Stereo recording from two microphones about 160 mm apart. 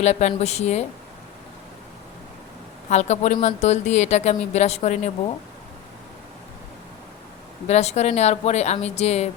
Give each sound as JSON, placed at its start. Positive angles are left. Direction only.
{"t": 0.0, "sound": "a woman's voice", "side_deg": 45}
{"t": 2.9, "sound": "a woman's voice", "side_deg": 45}
{"t": 7.7, "sound": "a woman's voice", "side_deg": 45}